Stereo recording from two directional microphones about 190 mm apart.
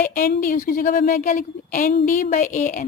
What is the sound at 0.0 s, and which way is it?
A woman's voice, 45° left (ahead or behind).